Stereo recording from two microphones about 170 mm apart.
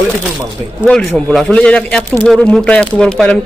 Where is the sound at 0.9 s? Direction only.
5° left (ahead or behind).